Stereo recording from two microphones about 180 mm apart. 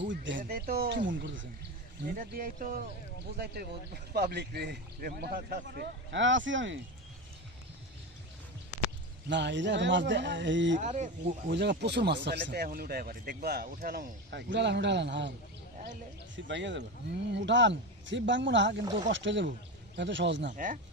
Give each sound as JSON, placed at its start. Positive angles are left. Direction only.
{"t": 0.0, "sound": "speech", "side_deg": -90}
{"t": 0.4, "sound": "speech", "side_deg": -55}
{"t": 1.0, "sound": "speech", "side_deg": -90}
{"t": 2.1, "sound": "speech", "side_deg": -50}
{"t": 3.3, "sound": "speech", "side_deg": -60}
{"t": 9.3, "sound": "speech", "side_deg": -80}
{"t": 10.8, "sound": "speech", "side_deg": -40}
{"t": 11.5, "sound": "speech", "side_deg": -70}
{"t": 16.3, "sound": "speech", "side_deg": -85}
{"t": 20.5, "sound": "speech", "side_deg": -45}